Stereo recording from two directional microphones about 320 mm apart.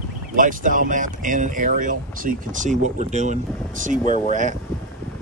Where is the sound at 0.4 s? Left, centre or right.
Right.